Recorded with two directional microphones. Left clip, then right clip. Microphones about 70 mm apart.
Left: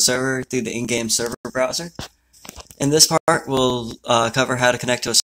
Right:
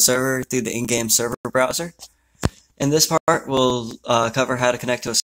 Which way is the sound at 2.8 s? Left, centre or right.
Centre.